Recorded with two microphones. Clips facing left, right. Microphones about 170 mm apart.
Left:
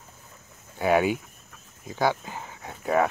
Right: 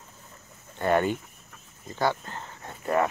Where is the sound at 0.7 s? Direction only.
5° left (ahead or behind).